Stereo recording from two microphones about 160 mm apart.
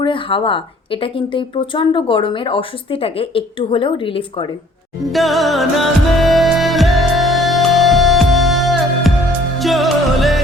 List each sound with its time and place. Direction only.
0.0 s speech: 30° left (ahead or behind)
5.1 s music: centre (ahead or behind)